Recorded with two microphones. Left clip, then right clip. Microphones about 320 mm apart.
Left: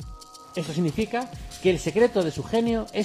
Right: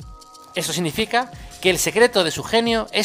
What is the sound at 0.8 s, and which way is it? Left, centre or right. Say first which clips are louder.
Speech: right 6 dB; right.